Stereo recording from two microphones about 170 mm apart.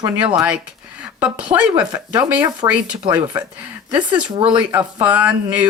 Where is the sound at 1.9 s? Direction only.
20° right (ahead or behind).